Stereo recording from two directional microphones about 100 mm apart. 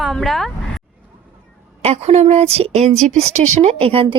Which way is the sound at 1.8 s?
90° right.